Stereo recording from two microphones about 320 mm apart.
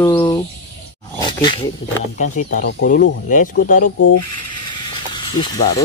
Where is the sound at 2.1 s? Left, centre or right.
Left.